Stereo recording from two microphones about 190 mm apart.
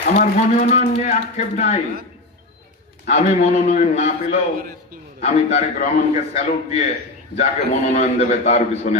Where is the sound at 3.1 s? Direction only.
35° left (ahead or behind).